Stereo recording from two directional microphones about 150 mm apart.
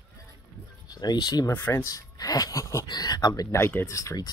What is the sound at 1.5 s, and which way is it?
Speech, 15° left (ahead or behind).